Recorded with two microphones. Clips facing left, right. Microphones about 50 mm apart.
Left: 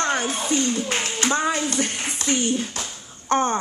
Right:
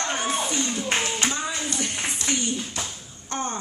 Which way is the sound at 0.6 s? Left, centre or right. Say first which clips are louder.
Left 3 dB; right.